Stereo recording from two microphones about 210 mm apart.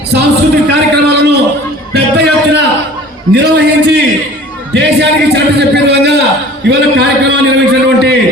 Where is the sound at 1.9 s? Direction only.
50° right (ahead or behind).